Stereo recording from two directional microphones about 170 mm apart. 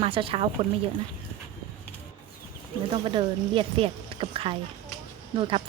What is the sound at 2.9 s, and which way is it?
Speech, 30° right (ahead or behind).